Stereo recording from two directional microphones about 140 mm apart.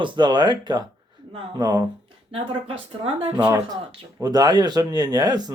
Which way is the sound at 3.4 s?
20° right (ahead or behind).